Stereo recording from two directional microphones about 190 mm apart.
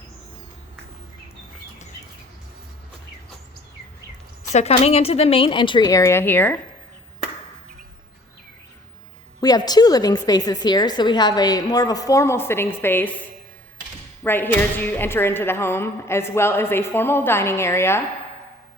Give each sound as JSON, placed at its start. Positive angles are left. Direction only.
{"t": 4.5, "sound": "a woman's voice", "side_deg": 35}
{"t": 9.4, "sound": "a woman's voice", "side_deg": 20}
{"t": 14.3, "sound": "speech", "side_deg": 10}